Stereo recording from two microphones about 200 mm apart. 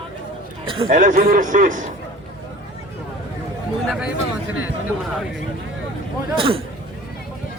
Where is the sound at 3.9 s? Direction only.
5° right (ahead or behind).